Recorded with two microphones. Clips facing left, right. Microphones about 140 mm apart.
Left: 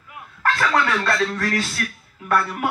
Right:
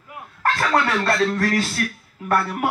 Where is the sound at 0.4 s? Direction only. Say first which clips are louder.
Even; 35° right (ahead or behind).